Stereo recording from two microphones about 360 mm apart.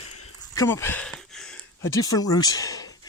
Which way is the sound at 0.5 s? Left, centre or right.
Centre.